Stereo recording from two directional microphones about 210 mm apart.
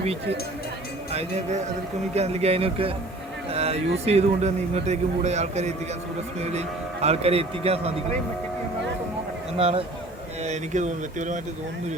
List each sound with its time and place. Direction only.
0.0 s a man's voice: 30° right (ahead or behind)
9.6 s a man's voice: 25° right (ahead or behind)